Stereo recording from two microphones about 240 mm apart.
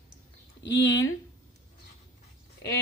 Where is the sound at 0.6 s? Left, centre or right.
Left.